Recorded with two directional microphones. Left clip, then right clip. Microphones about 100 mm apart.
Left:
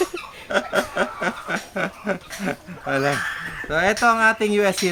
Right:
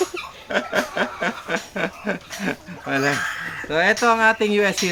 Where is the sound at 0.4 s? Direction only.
30° left (ahead or behind).